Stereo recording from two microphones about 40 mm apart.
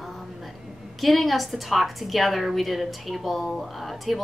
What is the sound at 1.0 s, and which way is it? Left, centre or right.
A woman's voice, centre.